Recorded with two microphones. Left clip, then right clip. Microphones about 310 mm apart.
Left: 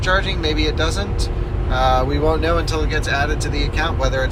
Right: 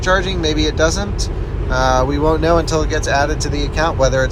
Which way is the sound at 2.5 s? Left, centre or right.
Centre.